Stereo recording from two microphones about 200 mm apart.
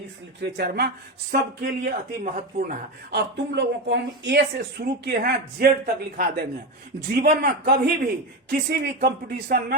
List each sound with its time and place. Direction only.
0.4 s speech: 55° right (ahead or behind)